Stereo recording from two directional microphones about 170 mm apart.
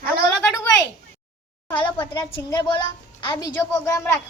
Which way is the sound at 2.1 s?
25° left (ahead or behind).